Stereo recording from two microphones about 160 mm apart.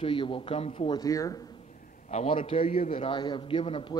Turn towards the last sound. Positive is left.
turn(degrees=35)  # may be behind; listen again after turning